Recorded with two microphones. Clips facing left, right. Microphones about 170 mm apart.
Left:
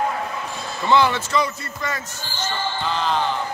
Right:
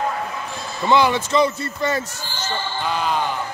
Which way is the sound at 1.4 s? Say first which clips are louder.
Right 6 dB; 30° right (ahead or behind).